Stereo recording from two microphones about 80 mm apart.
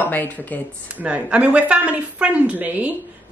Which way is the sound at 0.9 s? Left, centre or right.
Centre.